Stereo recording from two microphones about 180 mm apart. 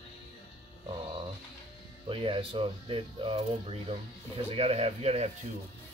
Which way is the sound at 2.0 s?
30° right (ahead or behind).